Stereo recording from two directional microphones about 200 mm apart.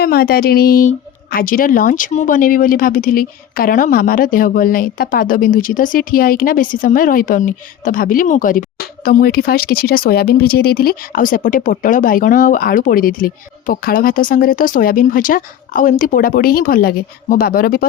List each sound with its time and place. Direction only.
0.0 s speech: 50° left (ahead or behind)